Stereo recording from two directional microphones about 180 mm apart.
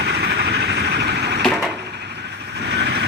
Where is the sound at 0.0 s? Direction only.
75° right (ahead or behind).